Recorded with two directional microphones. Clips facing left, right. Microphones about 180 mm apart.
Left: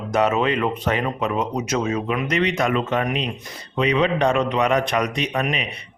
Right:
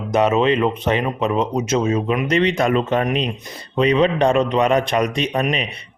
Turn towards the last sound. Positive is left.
turn(degrees=-30)  # may be behind; listen again after turning